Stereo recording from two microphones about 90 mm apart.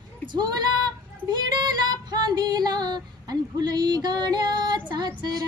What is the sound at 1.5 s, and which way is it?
Female singing, 50° right (ahead or behind).